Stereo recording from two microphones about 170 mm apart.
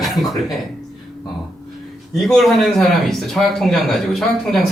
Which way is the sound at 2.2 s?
Centre (ahead or behind).